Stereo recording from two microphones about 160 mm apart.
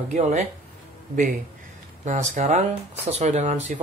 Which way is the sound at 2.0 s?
50° right (ahead or behind).